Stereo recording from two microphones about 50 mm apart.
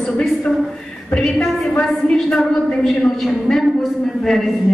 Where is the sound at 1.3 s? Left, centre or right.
Centre.